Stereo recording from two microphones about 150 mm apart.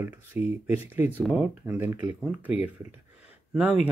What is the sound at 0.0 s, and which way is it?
Speech, 15° right (ahead or behind).